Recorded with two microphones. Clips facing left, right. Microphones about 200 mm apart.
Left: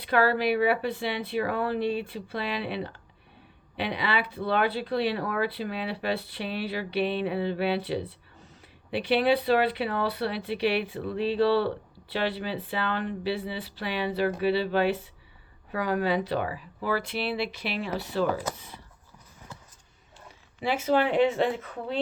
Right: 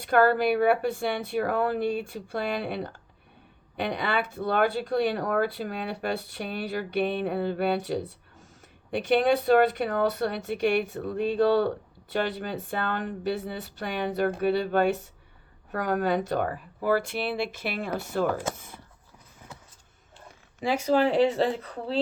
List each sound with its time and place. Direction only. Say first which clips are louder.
0.1 s speech: right 2 dB; 50° right (ahead or behind)
20.6 s speech: right 1 dB; 45° right (ahead or behind)